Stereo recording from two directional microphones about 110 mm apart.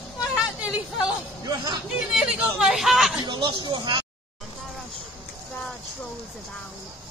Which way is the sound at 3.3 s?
45° right (ahead or behind).